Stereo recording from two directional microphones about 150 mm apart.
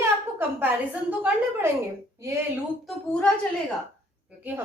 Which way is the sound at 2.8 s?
5° left (ahead or behind).